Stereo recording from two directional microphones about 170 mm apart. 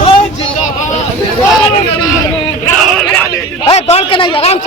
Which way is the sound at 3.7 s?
35° left (ahead or behind).